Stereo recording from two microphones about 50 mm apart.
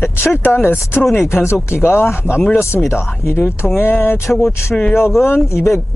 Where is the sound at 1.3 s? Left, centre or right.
Left.